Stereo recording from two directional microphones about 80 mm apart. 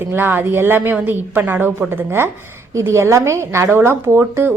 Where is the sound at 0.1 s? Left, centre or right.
Right.